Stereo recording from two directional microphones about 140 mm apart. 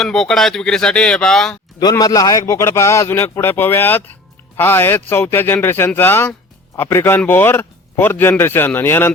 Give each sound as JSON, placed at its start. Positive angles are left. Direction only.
{"t": 0.0, "sound": "speech", "side_deg": 5}
{"t": 1.8, "sound": "a man's voice", "side_deg": 25}